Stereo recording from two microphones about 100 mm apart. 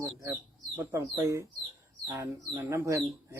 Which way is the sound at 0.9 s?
30° right (ahead or behind).